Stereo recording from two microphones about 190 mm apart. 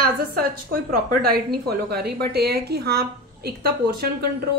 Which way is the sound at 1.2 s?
55° right (ahead or behind).